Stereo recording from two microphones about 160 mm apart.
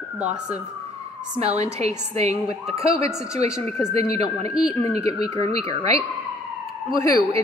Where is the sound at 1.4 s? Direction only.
45° right (ahead or behind).